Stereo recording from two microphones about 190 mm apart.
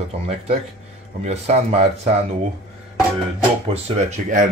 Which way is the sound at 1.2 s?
35° right (ahead or behind).